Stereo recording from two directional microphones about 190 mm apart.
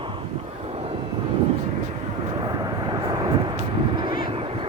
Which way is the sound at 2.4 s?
20° right (ahead or behind).